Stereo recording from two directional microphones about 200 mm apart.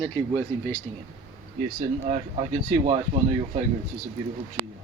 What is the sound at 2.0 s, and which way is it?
Speech, 35° right (ahead or behind).